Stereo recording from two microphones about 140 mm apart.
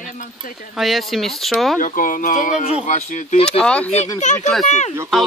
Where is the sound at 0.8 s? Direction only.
Centre (ahead or behind).